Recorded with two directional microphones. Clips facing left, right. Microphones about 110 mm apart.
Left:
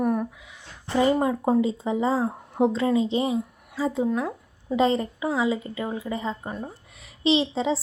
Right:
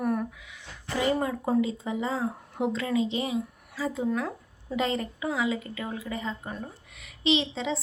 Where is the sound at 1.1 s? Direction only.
20° left (ahead or behind).